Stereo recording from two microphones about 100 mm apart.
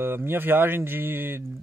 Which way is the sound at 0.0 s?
20° right (ahead or behind).